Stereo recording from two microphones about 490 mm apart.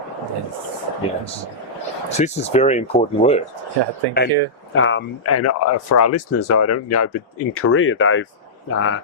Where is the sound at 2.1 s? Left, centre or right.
Centre.